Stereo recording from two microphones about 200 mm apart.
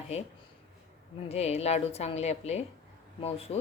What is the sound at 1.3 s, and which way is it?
A woman's voice, 30° left (ahead or behind).